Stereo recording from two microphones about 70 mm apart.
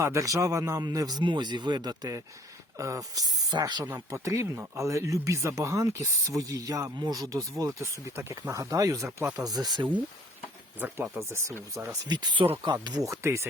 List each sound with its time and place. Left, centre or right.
0.0 s speech: right
0.9 s speech: right
2.7 s speech: right
3.9 s speech: right
7.8 s speech: right
9.0 s speech: right
9.3 s speech: right
10.8 s speech: right
11.2 s speech: right
11.7 s speech: right
12.0 s speech: right
13.1 s speech: right